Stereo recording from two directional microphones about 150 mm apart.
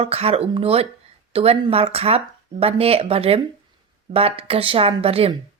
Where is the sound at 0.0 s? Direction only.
40° right (ahead or behind).